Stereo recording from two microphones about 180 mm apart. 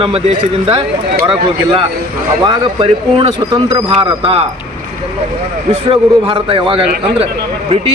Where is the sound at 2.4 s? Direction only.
25° right (ahead or behind).